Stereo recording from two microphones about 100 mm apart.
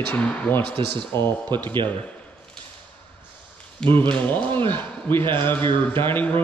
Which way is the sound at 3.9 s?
20° left (ahead or behind).